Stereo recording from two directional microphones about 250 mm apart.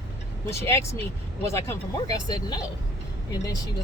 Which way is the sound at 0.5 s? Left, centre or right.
Centre.